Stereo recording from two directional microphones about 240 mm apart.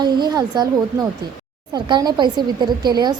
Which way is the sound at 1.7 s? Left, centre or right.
Centre.